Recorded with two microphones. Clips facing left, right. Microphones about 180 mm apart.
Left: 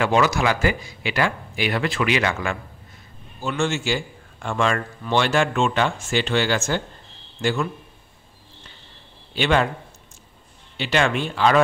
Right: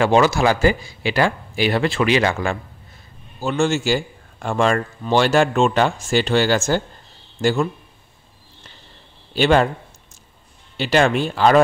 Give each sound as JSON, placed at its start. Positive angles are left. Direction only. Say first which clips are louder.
{"t": 0.0, "sound": "a man's voice", "louder": "right 4 dB", "side_deg": -30}
{"t": 9.3, "sound": "a man's voice", "louder": "right 5 dB", "side_deg": -40}
{"t": 10.8, "sound": "a man's voice", "louder": "right 4 dB", "side_deg": -40}